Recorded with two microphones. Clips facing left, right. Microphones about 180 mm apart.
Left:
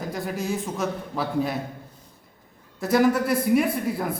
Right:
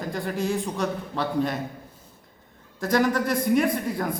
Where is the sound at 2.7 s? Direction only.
5° left (ahead or behind).